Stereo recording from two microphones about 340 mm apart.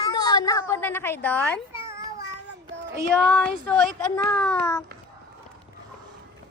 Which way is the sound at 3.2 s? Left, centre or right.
Centre.